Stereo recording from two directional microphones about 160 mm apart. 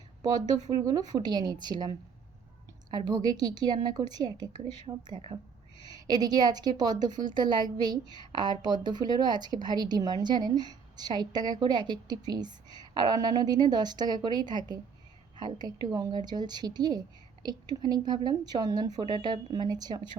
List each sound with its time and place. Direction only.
0.2 s a woman's voice: 25° right (ahead or behind)